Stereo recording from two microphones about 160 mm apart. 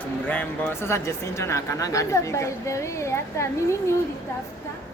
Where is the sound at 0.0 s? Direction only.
10° left (ahead or behind).